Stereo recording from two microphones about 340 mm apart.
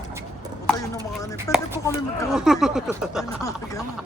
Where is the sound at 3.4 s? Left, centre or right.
Centre.